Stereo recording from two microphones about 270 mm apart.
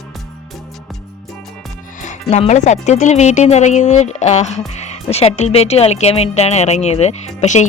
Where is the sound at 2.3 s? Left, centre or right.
Left.